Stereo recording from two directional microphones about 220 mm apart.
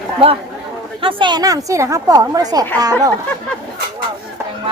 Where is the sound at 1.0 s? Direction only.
20° right (ahead or behind).